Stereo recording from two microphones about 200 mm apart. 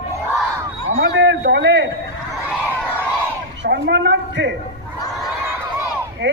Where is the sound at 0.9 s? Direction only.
65° right (ahead or behind).